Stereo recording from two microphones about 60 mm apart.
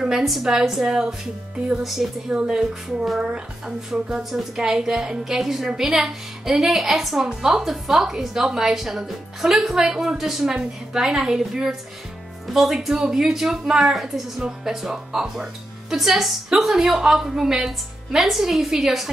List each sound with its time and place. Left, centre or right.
0.2 s a woman's voice: centre